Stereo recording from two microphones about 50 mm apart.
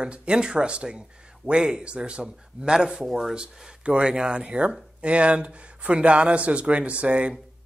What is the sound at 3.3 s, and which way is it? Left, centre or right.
Speech, centre.